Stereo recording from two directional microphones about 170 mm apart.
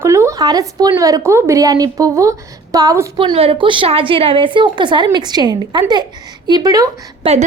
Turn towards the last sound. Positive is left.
turn(degrees=-30)  # may be behind; listen again after turning